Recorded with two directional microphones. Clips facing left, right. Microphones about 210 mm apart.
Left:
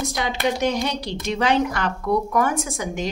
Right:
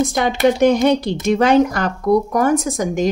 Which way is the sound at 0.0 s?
50° right (ahead or behind).